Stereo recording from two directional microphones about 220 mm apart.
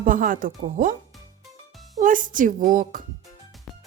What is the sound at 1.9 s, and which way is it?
Speech, 35° right (ahead or behind).